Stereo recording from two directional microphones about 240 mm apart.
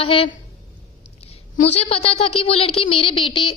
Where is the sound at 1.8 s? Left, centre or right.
Left.